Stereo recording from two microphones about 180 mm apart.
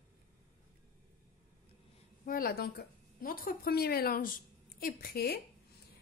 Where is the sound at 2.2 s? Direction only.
55° left (ahead or behind).